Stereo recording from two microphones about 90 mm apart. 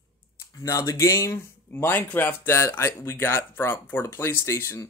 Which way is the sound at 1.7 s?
25° left (ahead or behind).